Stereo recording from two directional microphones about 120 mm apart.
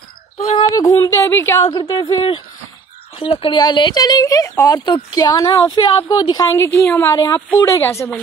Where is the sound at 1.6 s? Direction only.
35° left (ahead or behind).